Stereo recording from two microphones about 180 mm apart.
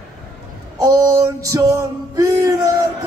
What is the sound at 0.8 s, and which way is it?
Male singing, 20° right (ahead or behind).